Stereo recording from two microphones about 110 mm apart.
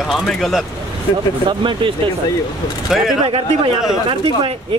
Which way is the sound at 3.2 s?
60° right (ahead or behind).